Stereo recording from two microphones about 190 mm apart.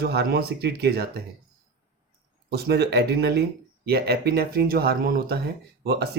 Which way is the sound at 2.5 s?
55° right (ahead or behind).